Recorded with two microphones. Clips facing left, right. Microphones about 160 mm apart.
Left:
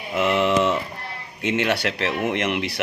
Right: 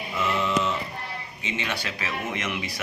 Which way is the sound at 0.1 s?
70° left (ahead or behind).